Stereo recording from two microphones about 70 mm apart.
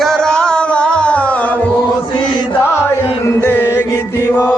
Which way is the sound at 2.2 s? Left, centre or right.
Left.